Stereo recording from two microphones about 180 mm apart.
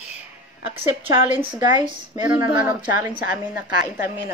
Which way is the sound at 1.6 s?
25° right (ahead or behind).